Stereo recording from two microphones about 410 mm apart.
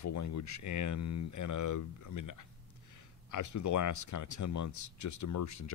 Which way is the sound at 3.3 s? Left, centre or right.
Left.